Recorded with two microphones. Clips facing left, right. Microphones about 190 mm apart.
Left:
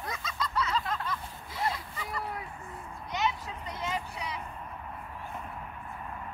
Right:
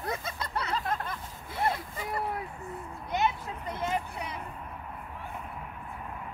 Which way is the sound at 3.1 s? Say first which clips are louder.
Right 3 dB; 55° right (ahead or behind).